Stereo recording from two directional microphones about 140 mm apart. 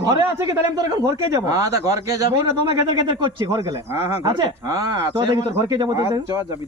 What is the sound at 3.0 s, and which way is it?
Speech, 35° right (ahead or behind).